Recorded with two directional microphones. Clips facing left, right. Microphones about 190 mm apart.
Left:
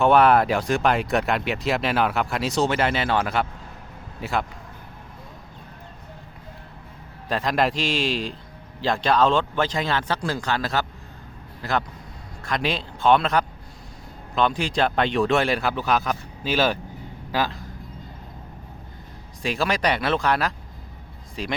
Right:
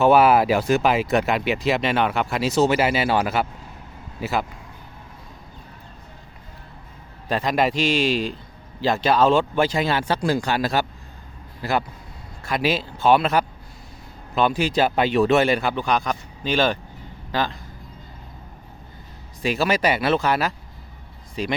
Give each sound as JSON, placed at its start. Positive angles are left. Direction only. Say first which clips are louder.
{"t": 0.0, "sound": "speech", "louder": "right 1 dB", "side_deg": -5}
{"t": 7.3, "sound": "speech", "louder": "right 1 dB", "side_deg": 0}
{"t": 19.4, "sound": "speech", "louder": "right 3 dB", "side_deg": -5}